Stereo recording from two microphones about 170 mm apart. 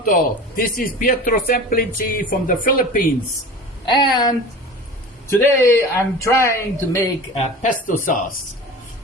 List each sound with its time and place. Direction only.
0.0 s speech: 55° left (ahead or behind)
3.8 s speech: 25° left (ahead or behind)
5.4 s speech: 15° left (ahead or behind)
7.6 s speech: 50° left (ahead or behind)